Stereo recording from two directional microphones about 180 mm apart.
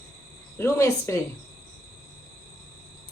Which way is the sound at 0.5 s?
15° left (ahead or behind).